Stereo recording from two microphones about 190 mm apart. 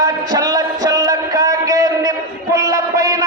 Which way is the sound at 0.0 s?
20° right (ahead or behind).